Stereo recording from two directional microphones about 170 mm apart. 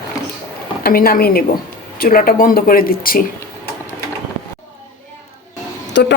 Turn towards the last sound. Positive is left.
turn(degrees=90)